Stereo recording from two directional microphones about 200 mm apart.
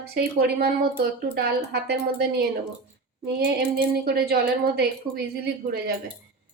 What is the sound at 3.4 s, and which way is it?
Speech, 50° right (ahead or behind).